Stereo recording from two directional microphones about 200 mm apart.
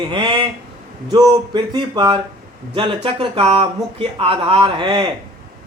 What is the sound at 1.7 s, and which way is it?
A man's voice, 25° right (ahead or behind).